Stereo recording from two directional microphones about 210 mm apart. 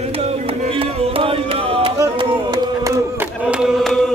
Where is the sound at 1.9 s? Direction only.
20° right (ahead or behind).